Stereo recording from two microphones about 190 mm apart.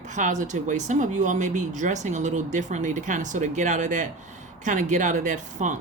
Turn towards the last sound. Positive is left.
turn(degrees=-40)  # may be behind; listen again after turning